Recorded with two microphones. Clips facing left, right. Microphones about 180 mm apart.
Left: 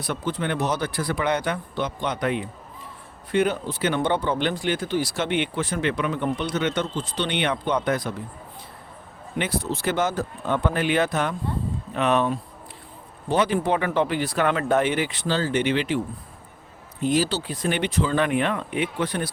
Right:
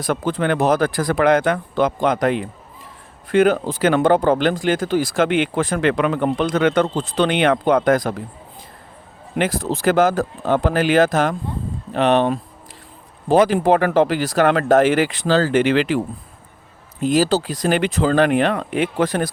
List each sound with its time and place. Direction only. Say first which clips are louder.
0.0 s speech: right 7 dB; 90° right
9.3 s speech: right 6 dB; 90° right
11.9 s speech: right 6 dB; 70° right (ahead or behind)
13.2 s speech: right 7 dB; 90° right
17.0 s speech: right 6 dB; 90° right